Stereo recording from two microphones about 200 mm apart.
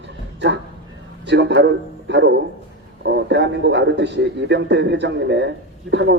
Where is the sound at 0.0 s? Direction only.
65° right (ahead or behind).